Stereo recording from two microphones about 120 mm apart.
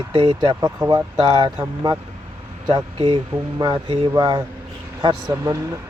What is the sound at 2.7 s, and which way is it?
Speech, 45° right (ahead or behind).